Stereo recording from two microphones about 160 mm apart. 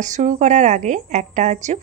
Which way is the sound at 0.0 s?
50° right (ahead or behind).